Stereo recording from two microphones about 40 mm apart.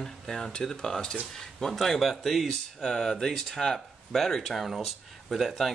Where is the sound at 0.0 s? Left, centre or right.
Centre.